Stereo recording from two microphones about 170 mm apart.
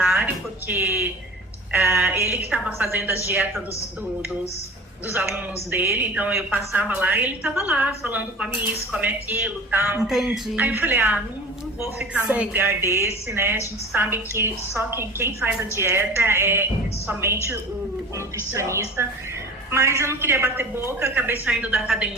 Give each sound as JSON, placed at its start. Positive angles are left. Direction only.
{"t": 0.7, "sound": "a woman's voice", "side_deg": -10}
{"t": 5.0, "sound": "a woman's voice", "side_deg": -15}
{"t": 18.5, "sound": "a woman's voice", "side_deg": -15}